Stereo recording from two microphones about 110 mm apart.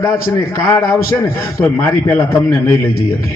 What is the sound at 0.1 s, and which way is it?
A man's voice, 30° left (ahead or behind).